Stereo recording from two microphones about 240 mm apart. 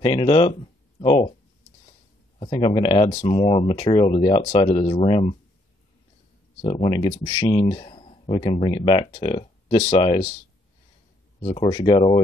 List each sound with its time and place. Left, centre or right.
0.0 s speech: centre
2.3 s speech: left
6.6 s speech: left
11.4 s speech: left